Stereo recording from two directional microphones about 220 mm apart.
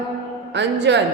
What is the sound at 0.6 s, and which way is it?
Speech, 50° right (ahead or behind).